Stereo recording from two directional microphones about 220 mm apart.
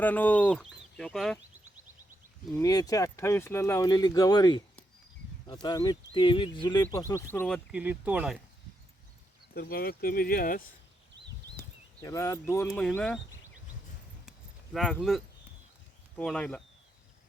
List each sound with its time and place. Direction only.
0.0 s speech: 5° left (ahead or behind)
2.6 s speech: 15° left (ahead or behind)
5.6 s speech: 20° left (ahead or behind); by 8.4 s 5° right (ahead or behind)
9.6 s speech: 45° left (ahead or behind)
12.0 s speech: 15° left (ahead or behind)
14.3 s a sound: centre (ahead or behind)
16.1 s speech: 5° left (ahead or behind)